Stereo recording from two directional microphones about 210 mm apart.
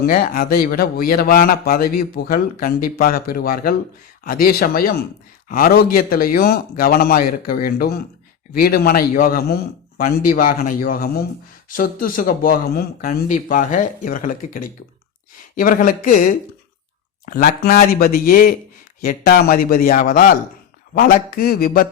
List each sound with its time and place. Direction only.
0.0 s a man's voice: 40° left (ahead or behind)